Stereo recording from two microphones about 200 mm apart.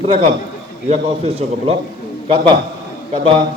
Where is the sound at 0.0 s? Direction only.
30° right (ahead or behind).